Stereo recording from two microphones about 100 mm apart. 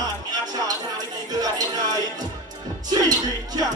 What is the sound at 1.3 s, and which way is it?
Music, 40° right (ahead or behind).